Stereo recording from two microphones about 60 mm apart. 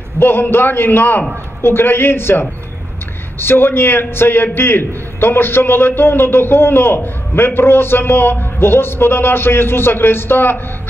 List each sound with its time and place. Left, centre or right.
0.2 s a man's voice: left